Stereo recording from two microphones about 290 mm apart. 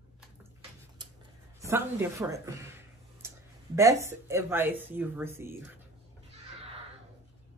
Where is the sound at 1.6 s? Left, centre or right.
Centre.